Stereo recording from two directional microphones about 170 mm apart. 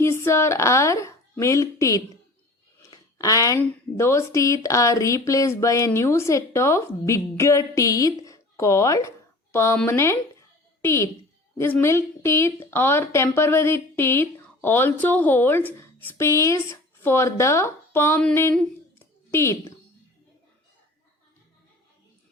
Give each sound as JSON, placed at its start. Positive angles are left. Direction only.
{"t": 0.0, "sound": "a woman's voice", "side_deg": 15}